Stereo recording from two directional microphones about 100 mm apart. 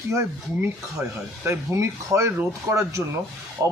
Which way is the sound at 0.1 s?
30° right (ahead or behind).